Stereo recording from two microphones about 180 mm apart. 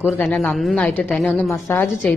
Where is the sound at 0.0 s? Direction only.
10° left (ahead or behind).